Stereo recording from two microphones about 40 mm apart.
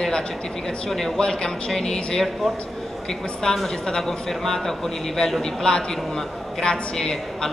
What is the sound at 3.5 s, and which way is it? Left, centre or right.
A man's voice, centre.